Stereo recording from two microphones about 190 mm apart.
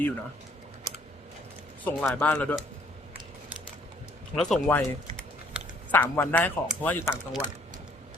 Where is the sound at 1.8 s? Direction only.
10° left (ahead or behind).